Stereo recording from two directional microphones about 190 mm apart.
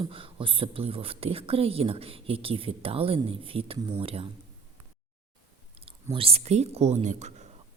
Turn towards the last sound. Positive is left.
turn(degrees=-35)  # may be behind; listen again after turning